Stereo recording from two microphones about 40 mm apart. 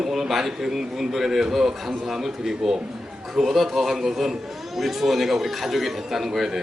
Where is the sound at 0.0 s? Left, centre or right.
Centre.